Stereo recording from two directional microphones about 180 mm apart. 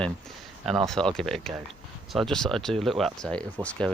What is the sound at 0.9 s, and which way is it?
Speech, 5° left (ahead or behind).